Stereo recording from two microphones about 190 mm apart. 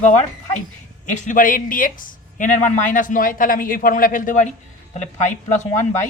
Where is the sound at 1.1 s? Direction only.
40° left (ahead or behind).